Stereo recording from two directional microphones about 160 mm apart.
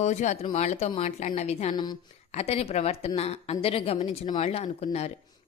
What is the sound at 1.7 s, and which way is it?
Speech, 25° left (ahead or behind).